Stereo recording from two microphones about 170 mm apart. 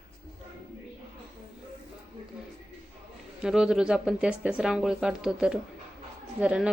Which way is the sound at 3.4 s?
5° right (ahead or behind).